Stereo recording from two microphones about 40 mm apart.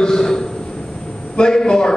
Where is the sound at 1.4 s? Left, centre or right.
Centre.